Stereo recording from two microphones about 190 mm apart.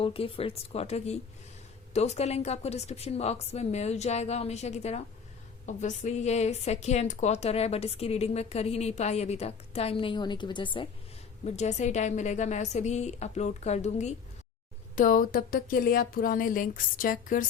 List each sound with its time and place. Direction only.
0.0 s a woman's voice: 30° left (ahead or behind)
11.4 s a woman's voice: 35° left (ahead or behind)